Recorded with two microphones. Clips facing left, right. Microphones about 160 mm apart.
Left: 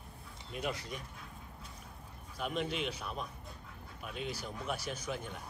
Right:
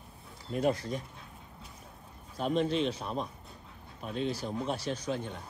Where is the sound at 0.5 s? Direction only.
35° right (ahead or behind).